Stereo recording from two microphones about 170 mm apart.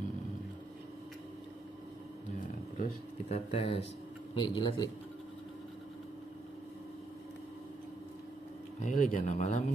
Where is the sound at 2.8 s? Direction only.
40° left (ahead or behind).